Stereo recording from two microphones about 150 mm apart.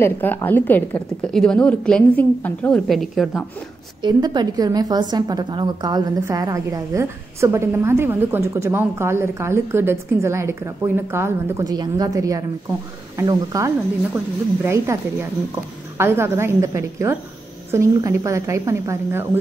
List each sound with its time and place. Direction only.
0.0 s a woman's voice: 15° left (ahead or behind)
2.9 s a woman's voice: centre (ahead or behind)
4.0 s a woman's voice: 30° right (ahead or behind)